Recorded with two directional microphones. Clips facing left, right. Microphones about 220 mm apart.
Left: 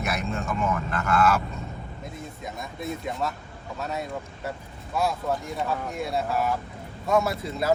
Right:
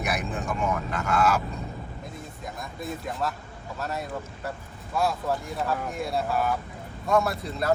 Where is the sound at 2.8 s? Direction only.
Centre (ahead or behind).